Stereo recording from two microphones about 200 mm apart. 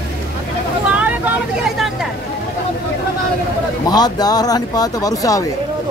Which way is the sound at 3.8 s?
20° left (ahead or behind).